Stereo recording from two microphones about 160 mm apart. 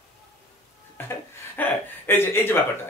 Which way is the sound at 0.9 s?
15° left (ahead or behind).